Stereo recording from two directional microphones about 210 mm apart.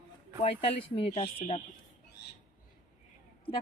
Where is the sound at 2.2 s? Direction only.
55° left (ahead or behind).